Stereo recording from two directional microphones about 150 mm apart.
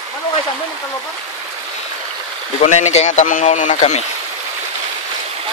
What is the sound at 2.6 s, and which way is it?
A man's voice, 50° left (ahead or behind).